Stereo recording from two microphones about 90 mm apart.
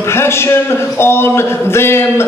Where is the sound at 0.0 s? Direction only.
30° left (ahead or behind).